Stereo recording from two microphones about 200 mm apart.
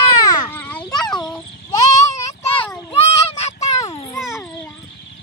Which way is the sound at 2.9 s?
30° left (ahead or behind).